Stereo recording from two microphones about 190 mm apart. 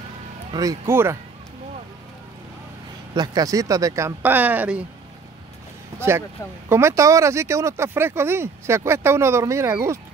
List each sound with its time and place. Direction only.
0.5 s speech: 20° right (ahead or behind)
3.2 s speech: 20° right (ahead or behind)
5.9 s speech: 15° right (ahead or behind)